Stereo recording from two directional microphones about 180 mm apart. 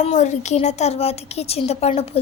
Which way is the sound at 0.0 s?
40° left (ahead or behind).